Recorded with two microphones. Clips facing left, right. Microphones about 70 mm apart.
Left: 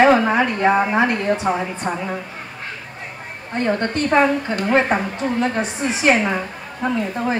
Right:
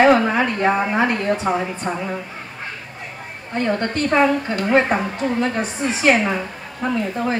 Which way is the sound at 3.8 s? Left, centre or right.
Left.